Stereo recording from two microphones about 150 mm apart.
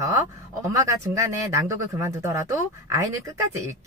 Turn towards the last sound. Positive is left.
turn(degrees=-20)  # may be behind; listen again after turning